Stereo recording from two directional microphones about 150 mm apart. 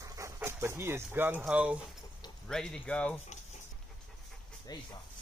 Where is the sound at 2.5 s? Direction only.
5° left (ahead or behind).